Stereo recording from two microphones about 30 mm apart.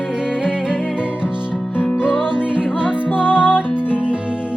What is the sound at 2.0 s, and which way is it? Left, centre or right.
Music, right.